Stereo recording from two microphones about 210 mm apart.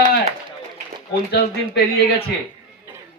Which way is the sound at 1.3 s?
45° left (ahead or behind).